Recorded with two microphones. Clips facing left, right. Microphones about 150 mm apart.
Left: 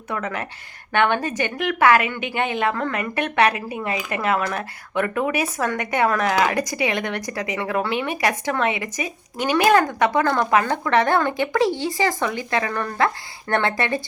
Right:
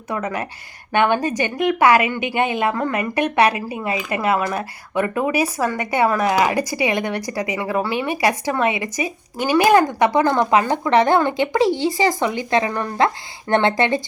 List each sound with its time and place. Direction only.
0.1 s speech: 15° right (ahead or behind)